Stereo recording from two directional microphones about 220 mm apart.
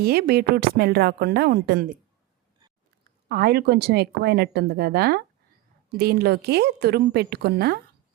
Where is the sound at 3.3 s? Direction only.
45° right (ahead or behind).